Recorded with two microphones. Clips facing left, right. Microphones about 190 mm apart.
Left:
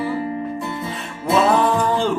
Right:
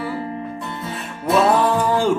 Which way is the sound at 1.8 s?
10° right (ahead or behind).